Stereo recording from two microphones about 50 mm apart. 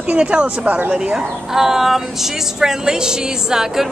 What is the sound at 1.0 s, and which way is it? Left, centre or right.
Speech, centre.